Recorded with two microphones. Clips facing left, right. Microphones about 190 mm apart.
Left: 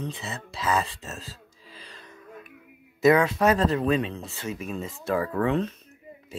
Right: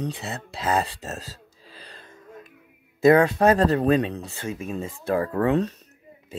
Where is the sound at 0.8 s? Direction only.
35° right (ahead or behind).